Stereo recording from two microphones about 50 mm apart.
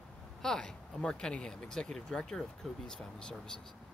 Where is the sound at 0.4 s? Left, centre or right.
Centre.